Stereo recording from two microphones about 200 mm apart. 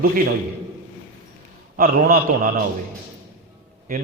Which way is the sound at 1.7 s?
45° right (ahead or behind).